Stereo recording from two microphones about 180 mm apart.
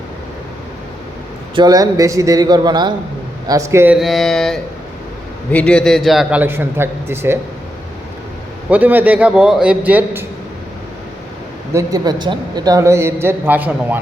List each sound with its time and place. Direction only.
1.5 s a man's voice: 20° right (ahead or behind)
3.9 s a man's voice: centre (ahead or behind)
8.7 s a man's voice: 10° right (ahead or behind)
11.7 s a man's voice: 20° right (ahead or behind)